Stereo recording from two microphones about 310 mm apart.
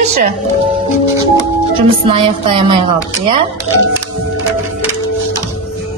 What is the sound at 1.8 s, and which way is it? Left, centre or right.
Music, centre.